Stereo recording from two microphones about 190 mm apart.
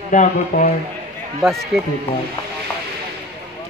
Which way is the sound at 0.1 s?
40° left (ahead or behind).